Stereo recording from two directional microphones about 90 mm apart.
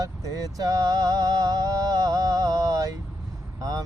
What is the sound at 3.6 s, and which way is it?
Vehicle, 40° right (ahead or behind).